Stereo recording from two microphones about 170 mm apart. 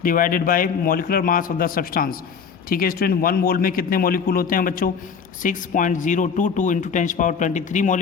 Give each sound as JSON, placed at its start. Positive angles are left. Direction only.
{"t": 0.0, "sound": "a man's voice", "side_deg": 55}